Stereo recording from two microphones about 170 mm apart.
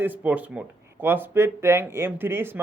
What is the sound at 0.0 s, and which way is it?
Speech, 10° right (ahead or behind).